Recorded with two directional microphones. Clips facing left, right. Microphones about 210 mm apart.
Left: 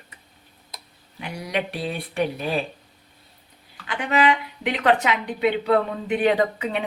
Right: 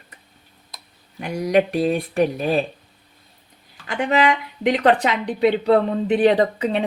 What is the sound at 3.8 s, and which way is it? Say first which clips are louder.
A woman's voice: right 2 dB; 45° right (ahead or behind).